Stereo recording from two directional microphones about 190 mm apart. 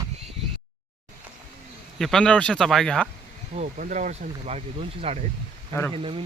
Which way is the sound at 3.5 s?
40° right (ahead or behind).